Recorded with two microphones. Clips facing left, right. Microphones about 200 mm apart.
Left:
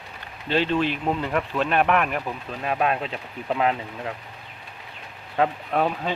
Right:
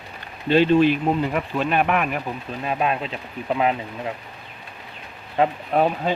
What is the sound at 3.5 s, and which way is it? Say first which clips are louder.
Speech: right 2 dB; 15° right (ahead or behind).